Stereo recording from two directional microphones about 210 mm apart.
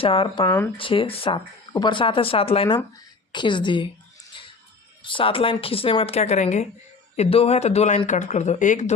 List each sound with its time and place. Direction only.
0.0 s speech: 25° left (ahead or behind)
5.0 s speech: 25° left (ahead or behind)